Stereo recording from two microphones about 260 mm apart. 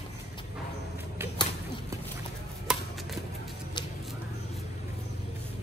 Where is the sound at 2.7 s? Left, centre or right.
Centre.